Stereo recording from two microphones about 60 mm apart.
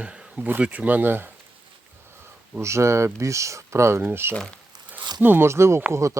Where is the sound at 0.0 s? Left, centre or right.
Centre.